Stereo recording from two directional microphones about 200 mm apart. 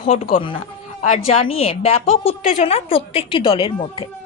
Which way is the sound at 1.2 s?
30° left (ahead or behind).